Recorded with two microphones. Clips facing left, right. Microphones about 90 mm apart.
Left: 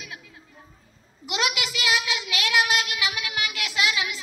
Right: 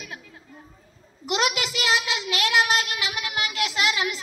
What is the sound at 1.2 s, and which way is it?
Child singing, 35° right (ahead or behind).